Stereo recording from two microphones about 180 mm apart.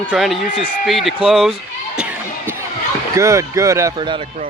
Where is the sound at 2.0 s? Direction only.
5° right (ahead or behind).